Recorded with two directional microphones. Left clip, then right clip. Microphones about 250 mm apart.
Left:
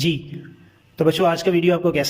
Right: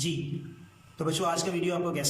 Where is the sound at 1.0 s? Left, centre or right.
Left.